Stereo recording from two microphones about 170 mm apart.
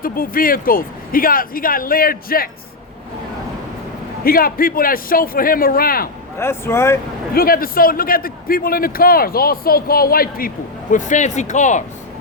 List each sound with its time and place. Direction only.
0.0 s a man's voice: 55° left (ahead or behind)
4.2 s a man's voice: 60° left (ahead or behind)
6.4 s speech: 15° left (ahead or behind)
7.3 s a man's voice: 60° left (ahead or behind)
10.9 s speech: 45° left (ahead or behind)